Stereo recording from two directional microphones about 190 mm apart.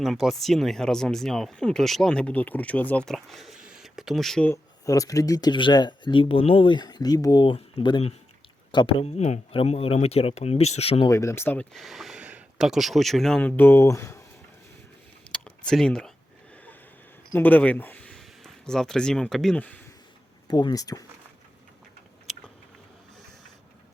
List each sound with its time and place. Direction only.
0.0 s speech: centre (ahead or behind)
4.5 s speech: 15° left (ahead or behind)
11.1 s speech: 15° left (ahead or behind)
15.3 s a sound: 5° left (ahead or behind)
17.3 s speech: 10° left (ahead or behind)
20.5 s speech: 20° left (ahead or behind)